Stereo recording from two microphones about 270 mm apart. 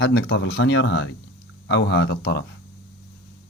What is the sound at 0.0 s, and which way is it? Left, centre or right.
Speech, left.